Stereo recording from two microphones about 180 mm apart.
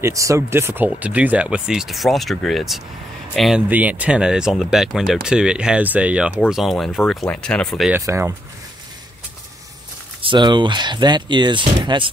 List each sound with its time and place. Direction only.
0.0 s speech: 15° right (ahead or behind); by 7.9 s centre (ahead or behind)
7.9 s speech: 15° right (ahead or behind)
10.2 s speech: 25° right (ahead or behind)